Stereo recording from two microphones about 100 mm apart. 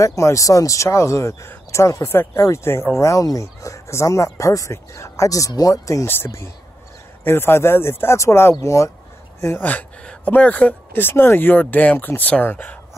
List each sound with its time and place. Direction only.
0.0 s speech: 30° left (ahead or behind)
6.0 s speech: 25° left (ahead or behind)